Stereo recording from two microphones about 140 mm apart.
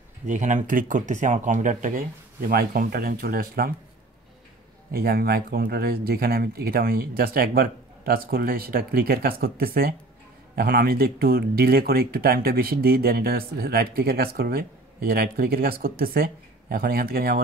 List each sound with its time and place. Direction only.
0.3 s speech: 60° right (ahead or behind); by 3.7 s 90° right
4.9 s speech: 90° right